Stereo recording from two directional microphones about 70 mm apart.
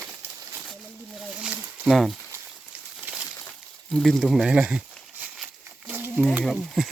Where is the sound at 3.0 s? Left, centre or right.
Right.